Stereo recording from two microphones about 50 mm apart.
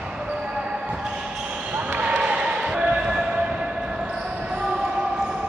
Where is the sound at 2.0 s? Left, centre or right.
Right.